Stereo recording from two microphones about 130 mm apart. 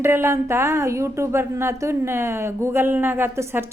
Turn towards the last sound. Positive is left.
turn(degrees=-20)  # may be behind; listen again after turning